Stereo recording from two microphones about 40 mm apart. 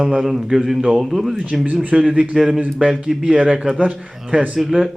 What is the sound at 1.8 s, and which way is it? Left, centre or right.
A man's voice, right.